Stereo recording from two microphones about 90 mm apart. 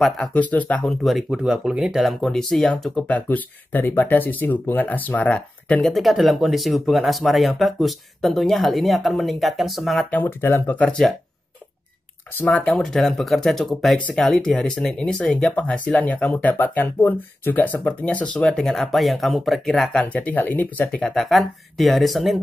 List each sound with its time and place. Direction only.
0.0 s speech: 15° left (ahead or behind)
1.3 s speech: 5° right (ahead or behind); by 5.8 s 15° left (ahead or behind)
5.8 s speech: centre (ahead or behind)
10.1 s speech: 25° left (ahead or behind)
10.8 s speech: 10° left (ahead or behind)
12.4 s speech: 15° left (ahead or behind)
21.0 s speech: 5° left (ahead or behind)